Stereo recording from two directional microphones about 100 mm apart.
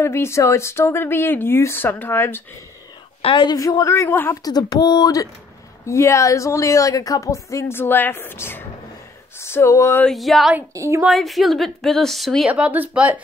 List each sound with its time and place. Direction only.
0.0 s speech: 25° left (ahead or behind)
3.2 s a woman's voice: 65° left (ahead or behind)
3.4 s a woman's voice: 40° left (ahead or behind); by 4.4 s 20° left (ahead or behind)
4.5 s a woman's voice: 40° left (ahead or behind)
10.0 s a woman's voice: centre (ahead or behind)
10.7 s a woman's voice: 30° right (ahead or behind)
11.1 s a woman's voice: centre (ahead or behind)
12.4 s speech: 10° right (ahead or behind)